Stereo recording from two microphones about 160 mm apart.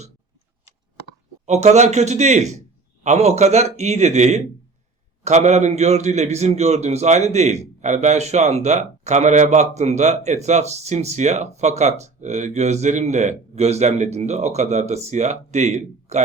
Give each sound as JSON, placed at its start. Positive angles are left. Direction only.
{"t": 1.5, "sound": "speech", "side_deg": -45}